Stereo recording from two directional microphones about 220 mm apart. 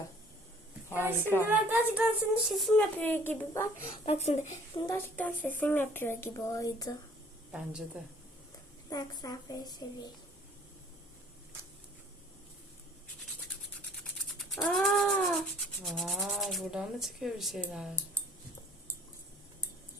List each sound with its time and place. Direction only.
1.2 s a woman's voice: 10° left (ahead or behind)
1.5 s a woman's voice: 5° right (ahead or behind); by 3.7 s 10° left (ahead or behind)
3.8 s speech: 30° left (ahead or behind)
4.9 s a woman's voice: 10° left (ahead or behind)
7.5 s cat: 5° right (ahead or behind)
8.9 s a woman's voice: 15° left (ahead or behind)
14.3 s cat: centre (ahead or behind)